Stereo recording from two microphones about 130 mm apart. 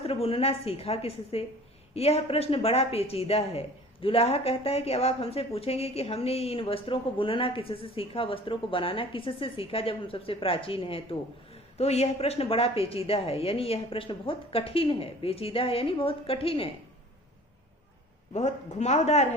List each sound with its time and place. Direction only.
0.0 s speech: 50° left (ahead or behind)
18.3 s speech: 60° left (ahead or behind)